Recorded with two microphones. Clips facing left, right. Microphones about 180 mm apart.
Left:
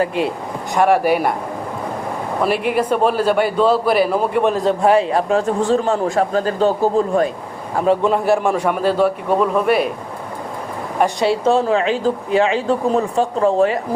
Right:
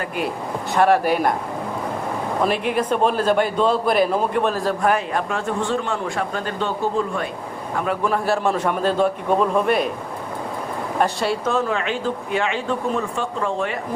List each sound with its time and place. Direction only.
0.7 s a man's voice: 15° left (ahead or behind)
2.4 s a man's voice: 10° left (ahead or behind); by 7.3 s 40° left (ahead or behind)
7.8 s a man's voice: 25° left (ahead or behind); by 9.9 s 5° left (ahead or behind)
11.0 s a man's voice: 20° left (ahead or behind)
11.4 s speech: 30° left (ahead or behind)